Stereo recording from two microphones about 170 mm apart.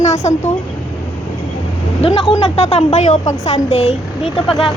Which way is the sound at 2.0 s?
35° left (ahead or behind).